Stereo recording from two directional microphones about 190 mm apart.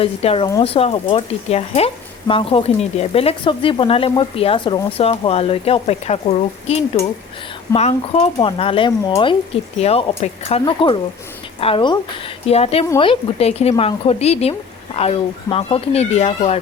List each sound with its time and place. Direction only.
0.0 s speech: 30° left (ahead or behind)